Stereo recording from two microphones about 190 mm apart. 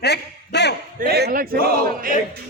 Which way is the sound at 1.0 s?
55° right (ahead or behind).